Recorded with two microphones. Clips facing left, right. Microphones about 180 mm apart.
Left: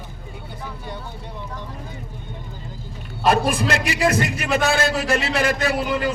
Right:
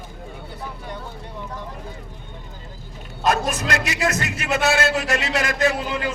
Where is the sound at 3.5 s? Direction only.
30° left (ahead or behind).